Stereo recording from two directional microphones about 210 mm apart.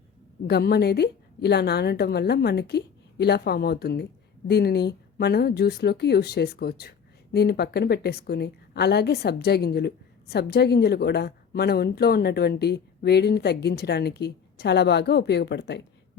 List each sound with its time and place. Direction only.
0.4 s a woman's voice: 50° left (ahead or behind)